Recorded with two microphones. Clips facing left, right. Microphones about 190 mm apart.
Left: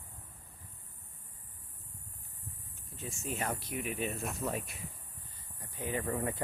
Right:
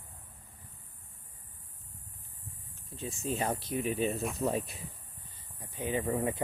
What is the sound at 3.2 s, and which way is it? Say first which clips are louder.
Speech: right 4 dB; 30° right (ahead or behind).